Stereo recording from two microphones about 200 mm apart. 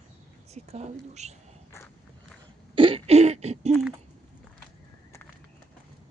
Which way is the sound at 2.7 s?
25° right (ahead or behind).